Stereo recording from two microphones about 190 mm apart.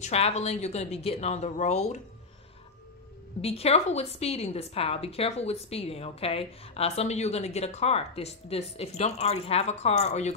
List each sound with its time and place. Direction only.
0.0 s a woman's voice: 35° left (ahead or behind)
3.3 s a woman's voice: 30° left (ahead or behind)